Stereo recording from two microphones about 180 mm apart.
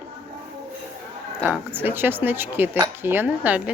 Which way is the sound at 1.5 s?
10° right (ahead or behind).